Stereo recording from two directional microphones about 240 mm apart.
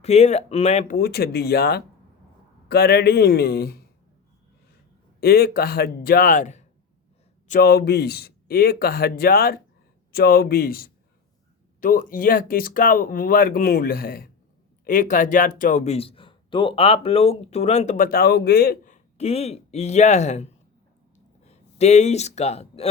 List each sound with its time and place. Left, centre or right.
0.0 s speech: left
5.2 s speech: left
19.1 s a man's voice: left